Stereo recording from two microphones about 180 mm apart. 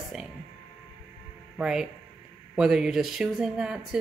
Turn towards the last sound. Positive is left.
turn(degrees=-5)  # may be behind; listen again after turning